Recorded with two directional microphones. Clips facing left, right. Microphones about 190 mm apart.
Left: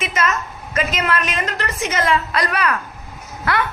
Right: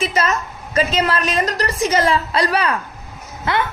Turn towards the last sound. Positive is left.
turn(degrees=-25)  # may be behind; listen again after turning